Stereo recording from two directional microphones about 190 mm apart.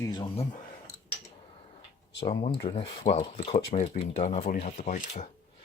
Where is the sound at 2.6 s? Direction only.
30° left (ahead or behind).